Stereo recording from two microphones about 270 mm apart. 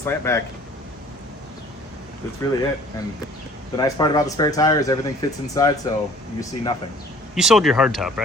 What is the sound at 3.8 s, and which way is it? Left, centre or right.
Speech, centre.